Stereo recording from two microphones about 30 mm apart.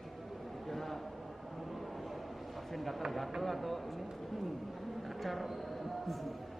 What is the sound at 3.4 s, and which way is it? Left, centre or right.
Speech, centre.